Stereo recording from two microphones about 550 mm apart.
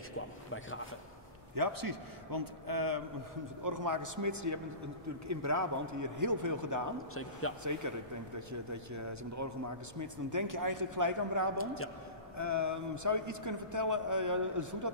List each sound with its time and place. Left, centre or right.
1.5 s a man's voice: right
7.5 s speech: left
7.8 s a man's voice: right